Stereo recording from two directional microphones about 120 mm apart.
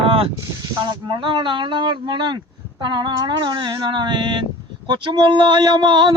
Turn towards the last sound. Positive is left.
turn(degrees=-40)  # may be behind; listen again after turning